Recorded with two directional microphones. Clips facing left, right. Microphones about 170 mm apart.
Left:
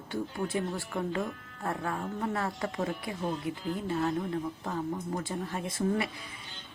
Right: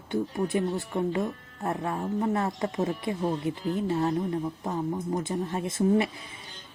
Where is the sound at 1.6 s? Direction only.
25° right (ahead or behind).